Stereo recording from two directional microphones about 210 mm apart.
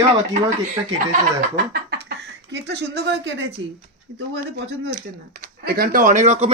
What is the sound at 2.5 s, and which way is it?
Speech, 55° right (ahead or behind).